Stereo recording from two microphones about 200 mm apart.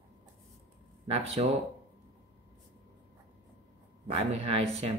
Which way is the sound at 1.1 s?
30° right (ahead or behind).